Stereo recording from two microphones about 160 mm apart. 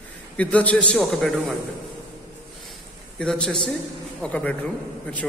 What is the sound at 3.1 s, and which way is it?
A man's voice, 5° left (ahead or behind).